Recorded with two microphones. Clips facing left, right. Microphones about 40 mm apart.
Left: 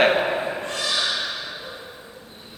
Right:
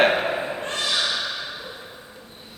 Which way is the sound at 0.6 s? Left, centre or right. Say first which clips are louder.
Right 1 dB; right.